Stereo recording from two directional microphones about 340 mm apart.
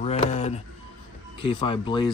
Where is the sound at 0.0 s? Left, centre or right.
Centre.